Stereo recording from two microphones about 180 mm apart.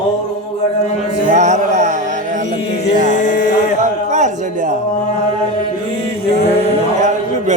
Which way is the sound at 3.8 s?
40° right (ahead or behind).